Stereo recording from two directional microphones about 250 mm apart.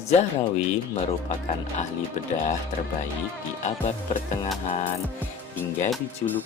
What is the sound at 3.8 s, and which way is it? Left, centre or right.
Speech, left.